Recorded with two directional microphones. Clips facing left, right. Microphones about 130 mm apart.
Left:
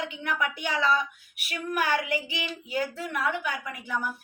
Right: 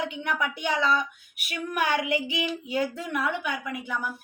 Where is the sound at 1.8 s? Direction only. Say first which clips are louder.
Right 2 dB; 20° right (ahead or behind).